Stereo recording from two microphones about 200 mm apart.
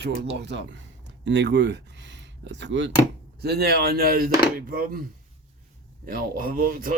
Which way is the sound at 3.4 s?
50° right (ahead or behind).